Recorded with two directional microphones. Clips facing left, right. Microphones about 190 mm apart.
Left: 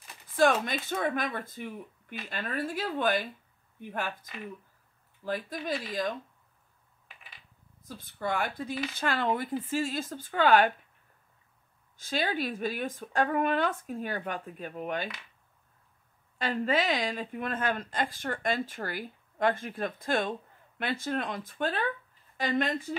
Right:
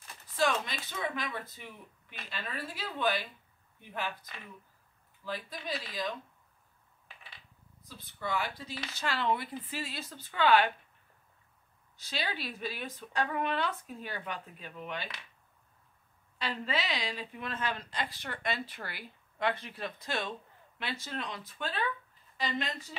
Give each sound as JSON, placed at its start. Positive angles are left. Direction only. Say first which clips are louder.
{"t": 0.4, "sound": "a woman's voice", "louder": "left 6 dB", "side_deg": 50}
{"t": 8.0, "sound": "a woman's voice", "louder": "left 3 dB", "side_deg": 50}
{"t": 12.0, "sound": "a woman's voice", "louder": "left 7 dB", "side_deg": 50}
{"t": 16.3, "sound": "a woman's voice", "louder": "left 7 dB", "side_deg": 50}